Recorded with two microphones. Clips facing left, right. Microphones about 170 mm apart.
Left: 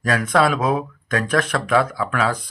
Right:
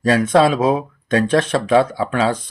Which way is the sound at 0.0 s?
25° right (ahead or behind).